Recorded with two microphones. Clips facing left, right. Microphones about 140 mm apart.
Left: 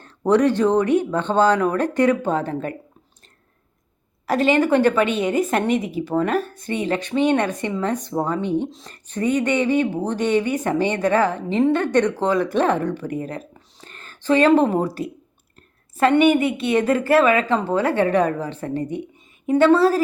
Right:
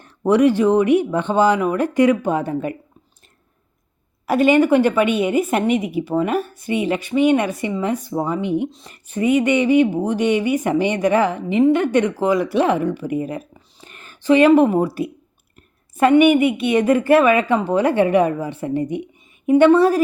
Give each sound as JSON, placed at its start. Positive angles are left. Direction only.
{"t": 0.0, "sound": "a woman's voice", "side_deg": -10}
{"t": 4.3, "sound": "a woman's voice", "side_deg": -15}